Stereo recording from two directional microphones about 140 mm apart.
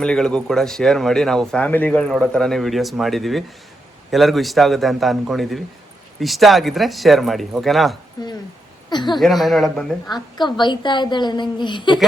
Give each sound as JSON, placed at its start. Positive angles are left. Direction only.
{"t": 0.0, "sound": "speech", "side_deg": 5}
{"t": 8.2, "sound": "a woman's voice", "side_deg": 30}
{"t": 9.1, "sound": "speech", "side_deg": 0}
{"t": 10.3, "sound": "a woman's voice", "side_deg": 35}